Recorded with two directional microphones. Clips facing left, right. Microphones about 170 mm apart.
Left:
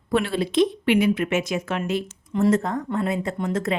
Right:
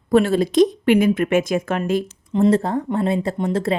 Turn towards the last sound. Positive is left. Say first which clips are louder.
# right 4 dB
turn(degrees=-30)  # may be behind; listen again after turning